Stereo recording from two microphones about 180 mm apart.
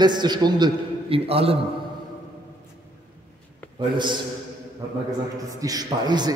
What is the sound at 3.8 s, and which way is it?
Speech, 25° right (ahead or behind).